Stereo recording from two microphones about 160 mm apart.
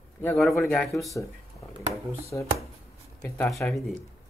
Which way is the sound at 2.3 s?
10° left (ahead or behind).